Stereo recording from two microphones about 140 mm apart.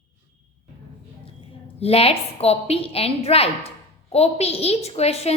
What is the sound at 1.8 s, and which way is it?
A woman's voice, 45° left (ahead or behind).